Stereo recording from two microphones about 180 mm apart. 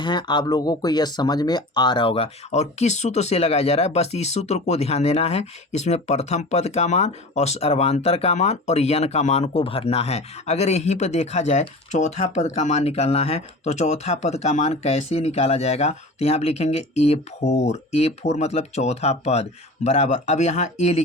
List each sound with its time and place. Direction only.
0.0 s speech: 25° left (ahead or behind)